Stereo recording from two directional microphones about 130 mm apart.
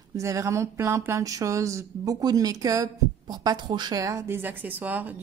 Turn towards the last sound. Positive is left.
turn(degrees=-10)  # may be behind; listen again after turning